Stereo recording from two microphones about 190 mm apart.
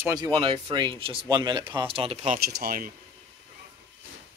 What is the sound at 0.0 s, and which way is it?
Speech, 20° right (ahead or behind).